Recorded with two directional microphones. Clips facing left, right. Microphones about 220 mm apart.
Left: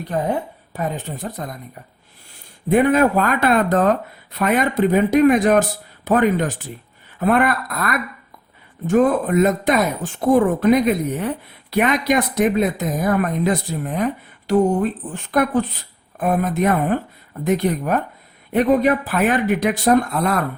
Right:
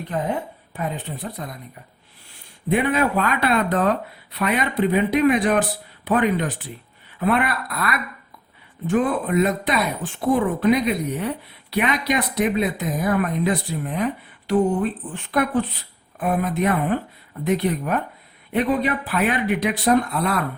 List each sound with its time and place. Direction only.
0.1 s speech: 40° left (ahead or behind)
2.6 s speech: 45° left (ahead or behind)